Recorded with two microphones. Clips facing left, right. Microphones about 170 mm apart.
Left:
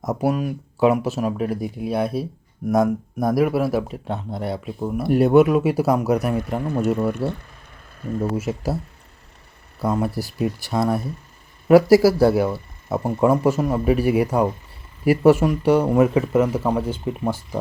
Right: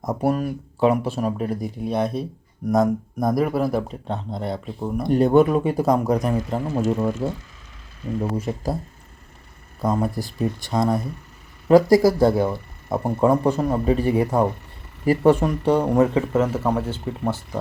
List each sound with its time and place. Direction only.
0.0 s speech: 5° left (ahead or behind)
7.2 s speech: 20° right (ahead or behind)
8.0 s speech: 45° left (ahead or behind)
8.4 s speech: 5° left (ahead or behind)
9.8 s speech: 5° left (ahead or behind)
15.3 s speech: 5° left (ahead or behind)